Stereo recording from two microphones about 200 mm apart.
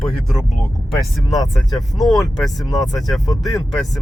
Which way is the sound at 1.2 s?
20° left (ahead or behind).